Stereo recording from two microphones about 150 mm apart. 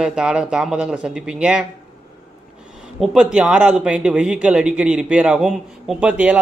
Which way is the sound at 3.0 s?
5° right (ahead or behind).